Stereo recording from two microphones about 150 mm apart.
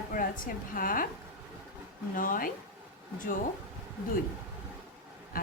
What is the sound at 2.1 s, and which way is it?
Speech, 65° left (ahead or behind).